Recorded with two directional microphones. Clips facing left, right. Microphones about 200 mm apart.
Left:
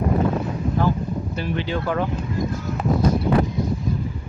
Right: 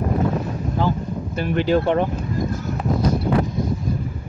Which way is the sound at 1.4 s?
50° right (ahead or behind).